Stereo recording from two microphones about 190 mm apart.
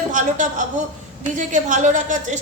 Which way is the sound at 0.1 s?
40° right (ahead or behind).